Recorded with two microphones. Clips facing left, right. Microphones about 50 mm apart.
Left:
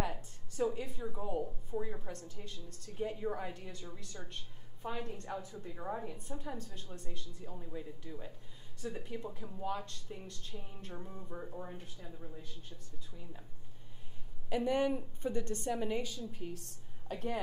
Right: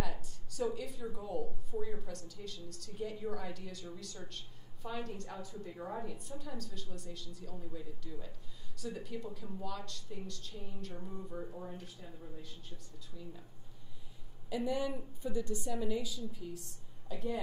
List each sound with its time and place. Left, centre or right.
0.0 s speech: left
14.5 s a woman's voice: left